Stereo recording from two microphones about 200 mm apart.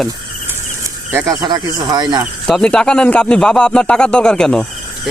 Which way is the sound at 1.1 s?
15° right (ahead or behind).